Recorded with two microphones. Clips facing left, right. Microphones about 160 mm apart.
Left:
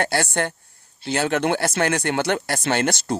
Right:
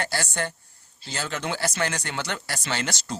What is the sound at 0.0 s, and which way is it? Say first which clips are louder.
Speech: left 6 dB; 60° left (ahead or behind).